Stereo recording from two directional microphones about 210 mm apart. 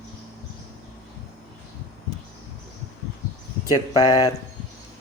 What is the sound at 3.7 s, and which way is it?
Speech, 20° left (ahead or behind).